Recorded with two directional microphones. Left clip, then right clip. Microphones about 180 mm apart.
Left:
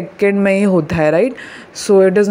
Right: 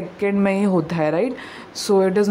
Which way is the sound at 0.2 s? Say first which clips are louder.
Left 7 dB; 25° left (ahead or behind).